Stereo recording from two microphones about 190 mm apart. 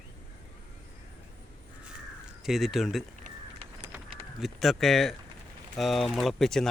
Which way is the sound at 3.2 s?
35° right (ahead or behind).